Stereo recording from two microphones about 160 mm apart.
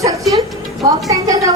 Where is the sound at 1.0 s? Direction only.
20° right (ahead or behind).